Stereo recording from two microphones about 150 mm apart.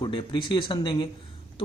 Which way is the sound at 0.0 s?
30° left (ahead or behind).